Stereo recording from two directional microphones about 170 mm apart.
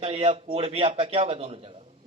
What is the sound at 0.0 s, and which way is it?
A man's voice, 40° right (ahead or behind).